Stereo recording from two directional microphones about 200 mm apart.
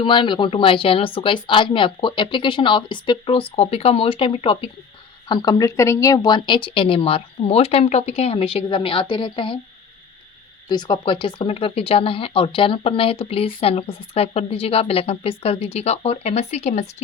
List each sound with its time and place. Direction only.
0.0 s speech: 25° left (ahead or behind)
10.7 s speech: 20° left (ahead or behind)